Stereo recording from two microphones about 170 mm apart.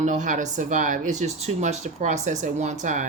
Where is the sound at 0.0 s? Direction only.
45° right (ahead or behind).